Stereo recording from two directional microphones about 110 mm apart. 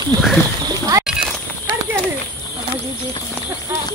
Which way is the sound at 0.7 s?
35° right (ahead or behind).